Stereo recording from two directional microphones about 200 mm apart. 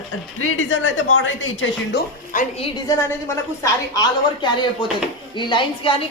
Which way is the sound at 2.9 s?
15° left (ahead or behind).